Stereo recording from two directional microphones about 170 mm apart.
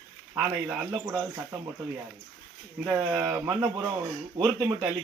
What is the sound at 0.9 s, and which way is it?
Speech, 15° right (ahead or behind).